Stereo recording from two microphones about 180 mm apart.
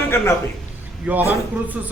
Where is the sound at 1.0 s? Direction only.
10° right (ahead or behind).